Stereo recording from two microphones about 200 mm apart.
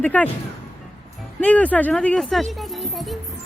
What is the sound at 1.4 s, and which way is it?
Speech, 5° left (ahead or behind).